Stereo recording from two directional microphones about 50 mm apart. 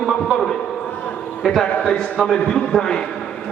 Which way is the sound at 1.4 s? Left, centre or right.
Centre.